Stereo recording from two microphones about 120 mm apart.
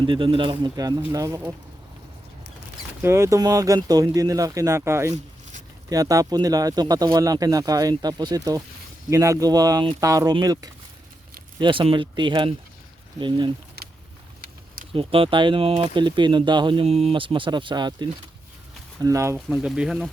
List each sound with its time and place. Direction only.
0.0 s speech: 45° right (ahead or behind)
0.8 s speech: 30° right (ahead or behind)
3.0 s speech: 20° right (ahead or behind)
5.1 s a sound: 90° right
5.9 s speech: 30° right (ahead or behind)
11.6 s speech: 45° right (ahead or behind)
14.9 s speech: 50° right (ahead or behind)
18.9 s speech: 25° right (ahead or behind)
19.5 s speech: 5° right (ahead or behind)